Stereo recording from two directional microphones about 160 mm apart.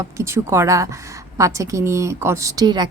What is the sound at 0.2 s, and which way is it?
A woman's voice, 15° right (ahead or behind).